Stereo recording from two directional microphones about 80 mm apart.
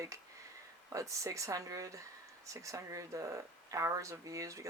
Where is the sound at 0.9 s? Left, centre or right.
Right.